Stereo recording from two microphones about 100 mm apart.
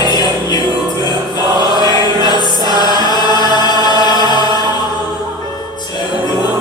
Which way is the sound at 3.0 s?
45° left (ahead or behind).